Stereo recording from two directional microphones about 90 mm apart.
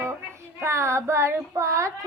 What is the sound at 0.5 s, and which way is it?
Child singing, 35° right (ahead or behind).